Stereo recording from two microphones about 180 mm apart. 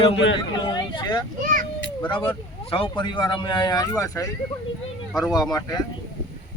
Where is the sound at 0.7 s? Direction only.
25° left (ahead or behind).